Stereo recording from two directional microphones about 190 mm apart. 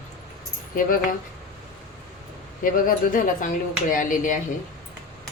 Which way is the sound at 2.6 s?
45° left (ahead or behind).